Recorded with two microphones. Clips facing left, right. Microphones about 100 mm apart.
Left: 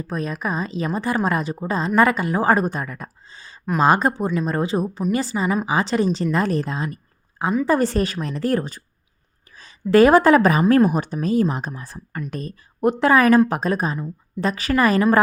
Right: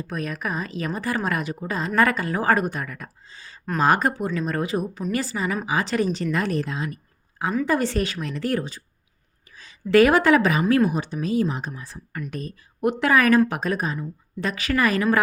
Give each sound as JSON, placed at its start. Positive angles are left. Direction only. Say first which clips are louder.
{"t": 0.1, "sound": "a woman's voice", "louder": "left 4 dB", "side_deg": 30}
{"t": 12.1, "sound": "speech", "louder": "left 2 dB", "side_deg": 35}